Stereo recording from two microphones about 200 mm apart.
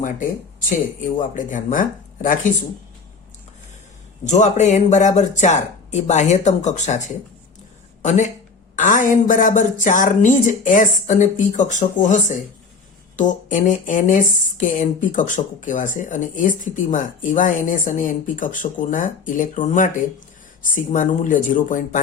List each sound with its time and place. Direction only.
1.2 s speech: 40° left (ahead or behind)
4.3 s speech: 35° left (ahead or behind)
8.0 s speech: 35° left (ahead or behind)